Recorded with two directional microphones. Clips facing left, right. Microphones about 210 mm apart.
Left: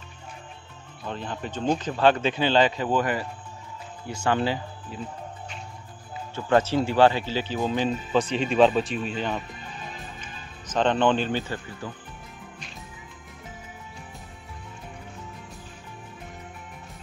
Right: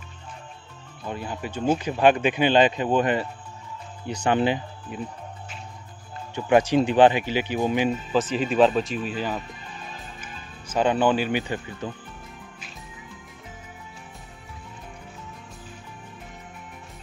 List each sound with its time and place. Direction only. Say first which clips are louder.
1.0 s a man's voice: right 1 dB; 10° right (ahead or behind)
6.3 s a man's voice: right 3 dB; 15° right (ahead or behind)
8.1 s speech: even; centre (ahead or behind)